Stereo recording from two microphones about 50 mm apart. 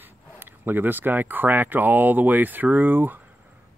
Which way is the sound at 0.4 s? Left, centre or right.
Right.